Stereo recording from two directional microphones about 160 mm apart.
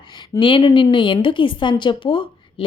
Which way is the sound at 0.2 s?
30° left (ahead or behind).